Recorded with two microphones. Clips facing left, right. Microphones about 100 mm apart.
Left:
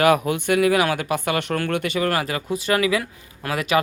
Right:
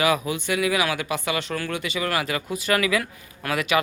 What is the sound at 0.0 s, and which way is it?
Speech, 55° left (ahead or behind).